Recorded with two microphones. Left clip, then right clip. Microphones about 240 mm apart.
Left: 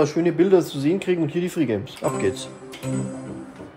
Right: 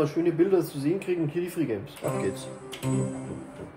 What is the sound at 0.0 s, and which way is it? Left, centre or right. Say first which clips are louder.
Speech: left 5 dB; left.